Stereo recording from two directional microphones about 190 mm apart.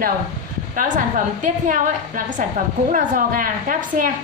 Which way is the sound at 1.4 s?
45° right (ahead or behind).